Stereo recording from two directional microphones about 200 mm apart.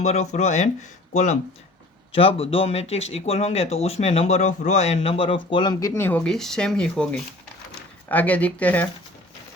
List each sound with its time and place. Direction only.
0.0 s speech: 35° left (ahead or behind); by 8.9 s 10° left (ahead or behind)